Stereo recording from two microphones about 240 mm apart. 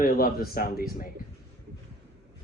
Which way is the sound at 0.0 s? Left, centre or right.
Left.